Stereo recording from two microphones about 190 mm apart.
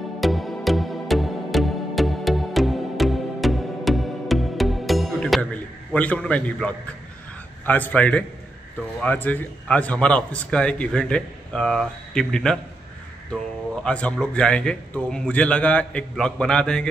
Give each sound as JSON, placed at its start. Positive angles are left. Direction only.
{"t": 0.2, "sound": "music", "side_deg": 0}
{"t": 7.6, "sound": "a man's voice", "side_deg": 10}
{"t": 13.8, "sound": "a man's voice", "side_deg": 5}